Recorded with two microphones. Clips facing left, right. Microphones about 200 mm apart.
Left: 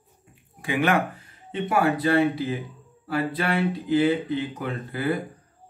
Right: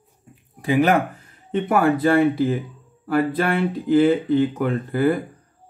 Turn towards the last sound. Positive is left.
turn(degrees=-50)  # may be behind; listen again after turning